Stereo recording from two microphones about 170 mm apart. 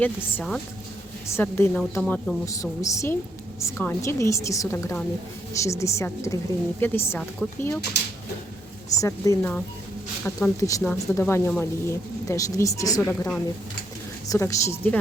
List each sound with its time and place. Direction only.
0.0 s a woman's voice: 10° left (ahead or behind)
2.5 s a woman's voice: 20° left (ahead or behind)
9.0 s a woman's voice: 20° left (ahead or behind)
13.0 s a woman's voice: 10° left (ahead or behind)